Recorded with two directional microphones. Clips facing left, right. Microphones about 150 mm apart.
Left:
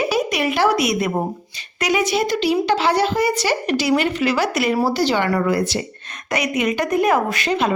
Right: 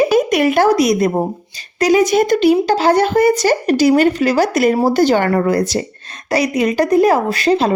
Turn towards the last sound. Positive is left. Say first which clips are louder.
# right 6 dB
turn(degrees=-35)  # may be behind; listen again after turning